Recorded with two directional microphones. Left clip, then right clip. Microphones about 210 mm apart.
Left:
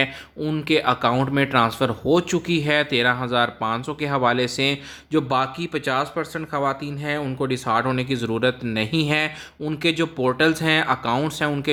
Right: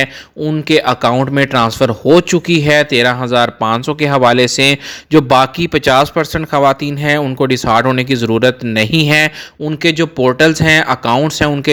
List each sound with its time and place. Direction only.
0.0 s speech: 25° right (ahead or behind)